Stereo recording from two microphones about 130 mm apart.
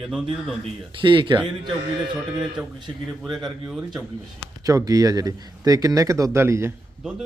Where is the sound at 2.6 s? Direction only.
5° right (ahead or behind).